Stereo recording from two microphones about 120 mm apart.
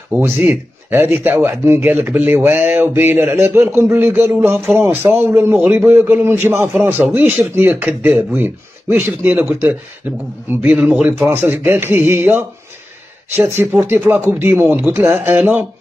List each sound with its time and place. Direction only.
0.1 s speech: 15° right (ahead or behind)
13.5 s speech: 20° right (ahead or behind)